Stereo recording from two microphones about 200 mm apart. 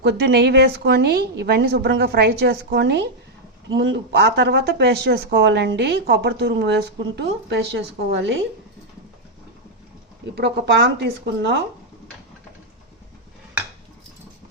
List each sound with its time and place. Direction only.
0.0 s speech: 55° right (ahead or behind)
10.3 s speech: 55° right (ahead or behind)